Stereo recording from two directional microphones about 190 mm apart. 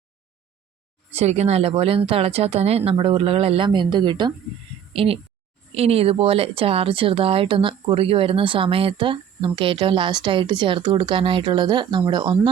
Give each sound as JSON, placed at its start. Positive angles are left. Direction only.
{"t": 1.1, "sound": "speech", "side_deg": -35}